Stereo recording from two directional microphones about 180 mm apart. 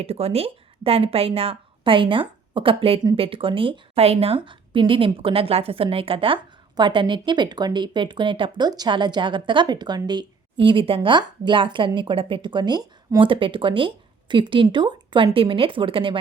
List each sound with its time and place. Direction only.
0.0 s a woman's voice: 35° right (ahead or behind)